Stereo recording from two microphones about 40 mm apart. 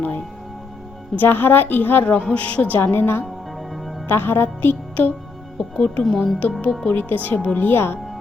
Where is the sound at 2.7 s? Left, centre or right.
Left.